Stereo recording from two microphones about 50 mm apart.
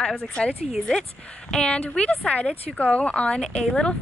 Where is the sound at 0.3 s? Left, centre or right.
Centre.